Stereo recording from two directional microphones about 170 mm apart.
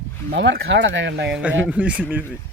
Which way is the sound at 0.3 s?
90° right.